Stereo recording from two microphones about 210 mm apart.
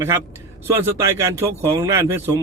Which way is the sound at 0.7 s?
15° right (ahead or behind).